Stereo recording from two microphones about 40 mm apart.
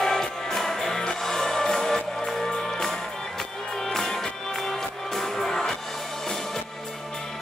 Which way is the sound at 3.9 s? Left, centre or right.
Centre.